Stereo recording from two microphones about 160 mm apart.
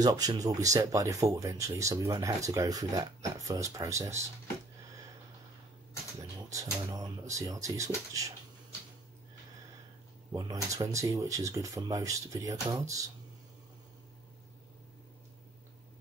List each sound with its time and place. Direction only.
0.0 s speech: 25° right (ahead or behind)
6.5 s speech: 20° right (ahead or behind)
10.3 s speech: 20° right (ahead or behind)